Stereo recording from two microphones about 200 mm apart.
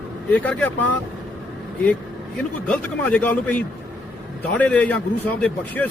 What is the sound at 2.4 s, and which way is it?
A man's voice, 5° left (ahead or behind).